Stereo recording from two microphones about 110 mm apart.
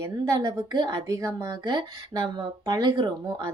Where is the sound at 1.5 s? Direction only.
45° right (ahead or behind).